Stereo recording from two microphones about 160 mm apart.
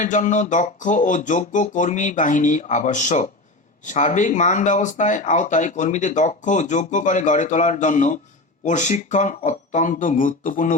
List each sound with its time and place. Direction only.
0.0 s speech: 50° left (ahead or behind)